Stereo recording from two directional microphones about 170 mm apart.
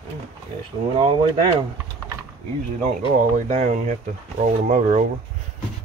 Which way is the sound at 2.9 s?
45° right (ahead or behind).